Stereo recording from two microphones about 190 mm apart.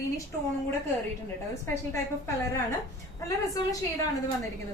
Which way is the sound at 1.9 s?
15° left (ahead or behind).